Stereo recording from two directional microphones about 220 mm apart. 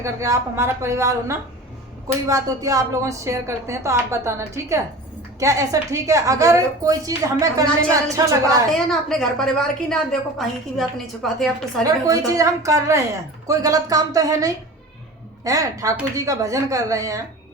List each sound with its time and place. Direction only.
0.0 s a woman's voice: 15° right (ahead or behind)
8.9 s a woman's voice: centre (ahead or behind)
11.9 s a woman's voice: 15° right (ahead or behind)